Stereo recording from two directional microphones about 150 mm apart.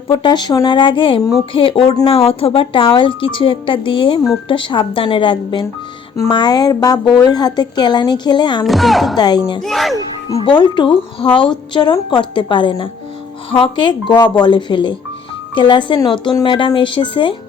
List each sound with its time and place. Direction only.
0.1 s a woman's voice: 30° left (ahead or behind)
8.6 s speech: centre (ahead or behind)
9.1 s a woman's voice: 30° left (ahead or behind)
9.6 s speech: centre (ahead or behind)
10.3 s speech: 30° left (ahead or behind)